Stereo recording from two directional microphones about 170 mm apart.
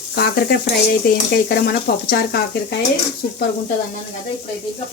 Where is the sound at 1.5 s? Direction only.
65° left (ahead or behind).